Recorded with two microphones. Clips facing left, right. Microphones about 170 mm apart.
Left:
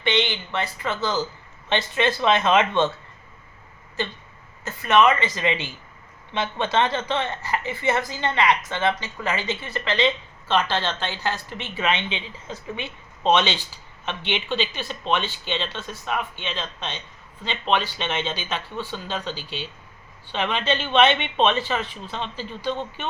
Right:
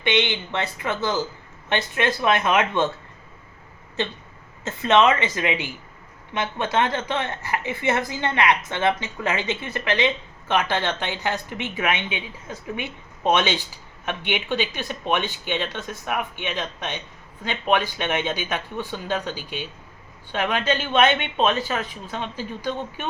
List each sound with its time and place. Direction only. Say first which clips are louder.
0.0 s a woman's voice: right 1 dB; 20° right (ahead or behind)
4.6 s a woman's voice: right 1 dB; 25° right (ahead or behind)